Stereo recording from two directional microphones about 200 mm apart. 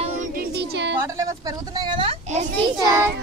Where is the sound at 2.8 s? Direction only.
15° right (ahead or behind).